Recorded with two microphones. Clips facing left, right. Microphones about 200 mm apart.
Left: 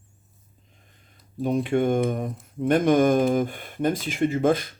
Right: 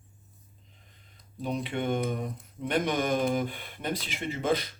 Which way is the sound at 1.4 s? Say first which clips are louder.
Left 9 dB; 50° left (ahead or behind).